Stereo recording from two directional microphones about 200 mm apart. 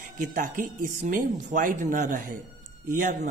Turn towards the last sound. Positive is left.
turn(degrees=-40)  # may be behind; listen again after turning